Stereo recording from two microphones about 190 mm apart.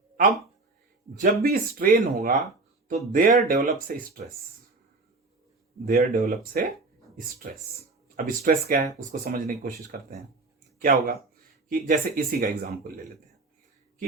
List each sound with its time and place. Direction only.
1.2 s speech: 50° right (ahead or behind)
5.8 s speech: 50° right (ahead or behind)